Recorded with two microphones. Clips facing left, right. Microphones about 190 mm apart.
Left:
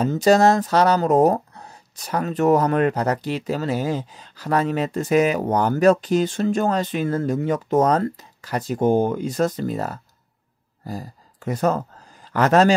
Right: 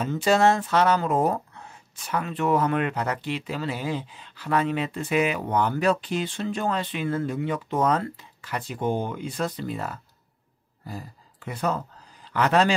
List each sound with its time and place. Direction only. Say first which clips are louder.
0.0 s speech: left 5 dB; 40° left (ahead or behind)